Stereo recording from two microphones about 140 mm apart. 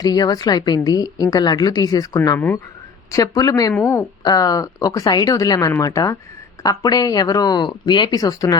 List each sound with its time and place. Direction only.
0.0 s a woman's voice: 25° left (ahead or behind)